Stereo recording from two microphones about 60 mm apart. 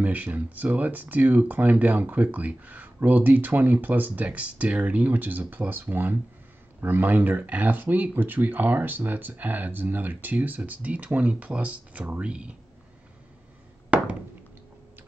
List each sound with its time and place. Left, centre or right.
0.0 s speech: right
13.8 s thunk: centre